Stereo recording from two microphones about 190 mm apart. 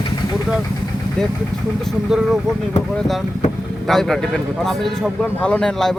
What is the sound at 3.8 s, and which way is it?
Speech, centre (ahead or behind).